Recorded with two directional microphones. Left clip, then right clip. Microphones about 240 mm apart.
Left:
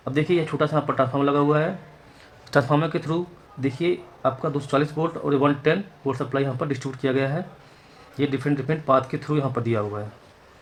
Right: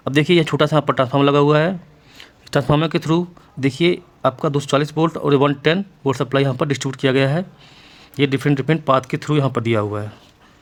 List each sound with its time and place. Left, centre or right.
0.0 s speech: right
2.5 s speech: right